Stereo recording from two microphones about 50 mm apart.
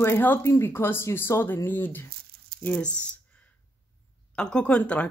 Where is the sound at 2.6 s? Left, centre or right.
Left.